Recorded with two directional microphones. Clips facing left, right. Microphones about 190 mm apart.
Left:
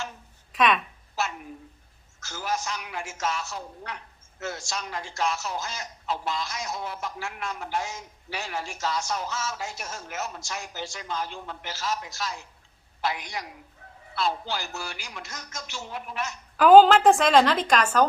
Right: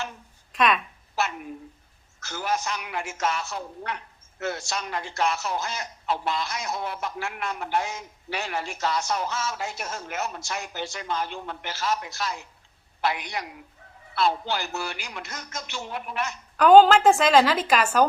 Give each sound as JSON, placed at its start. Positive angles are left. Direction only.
{"t": 0.5, "sound": "speech", "side_deg": 0}
{"t": 1.2, "sound": "a sound", "side_deg": -65}
{"t": 2.2, "sound": "a woman's voice", "side_deg": -60}
{"t": 16.6, "sound": "a woman's voice", "side_deg": 0}